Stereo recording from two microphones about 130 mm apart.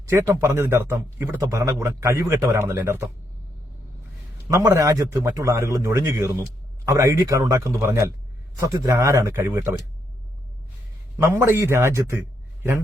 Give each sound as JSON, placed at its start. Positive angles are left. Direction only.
{"t": 0.1, "sound": "a man's voice", "side_deg": -20}
{"t": 1.5, "sound": "a man's voice", "side_deg": -25}
{"t": 4.5, "sound": "a man's voice", "side_deg": -25}
{"t": 11.2, "sound": "a man's voice", "side_deg": -20}